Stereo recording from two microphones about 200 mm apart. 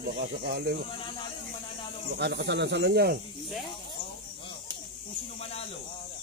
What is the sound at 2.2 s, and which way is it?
Speech, 55° right (ahead or behind).